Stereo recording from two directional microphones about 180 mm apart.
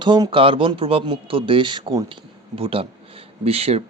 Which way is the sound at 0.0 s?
25° right (ahead or behind).